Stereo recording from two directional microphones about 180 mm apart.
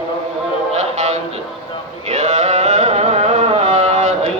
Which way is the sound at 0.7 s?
40° right (ahead or behind).